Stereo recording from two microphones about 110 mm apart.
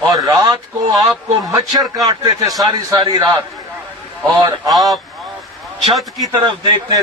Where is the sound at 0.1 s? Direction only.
30° right (ahead or behind).